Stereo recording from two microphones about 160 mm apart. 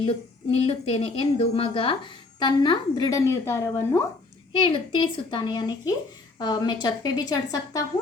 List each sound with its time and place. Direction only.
0.0 s a woman's voice: 35° left (ahead or behind); by 4.0 s 15° left (ahead or behind)
4.6 s speech: 30° left (ahead or behind)